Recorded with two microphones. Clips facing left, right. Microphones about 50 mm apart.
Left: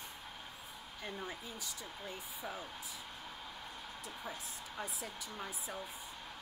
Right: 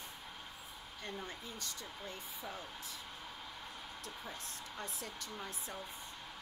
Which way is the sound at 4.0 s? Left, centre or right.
Centre.